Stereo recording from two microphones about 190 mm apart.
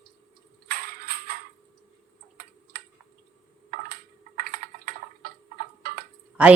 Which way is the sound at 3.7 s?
50° right (ahead or behind).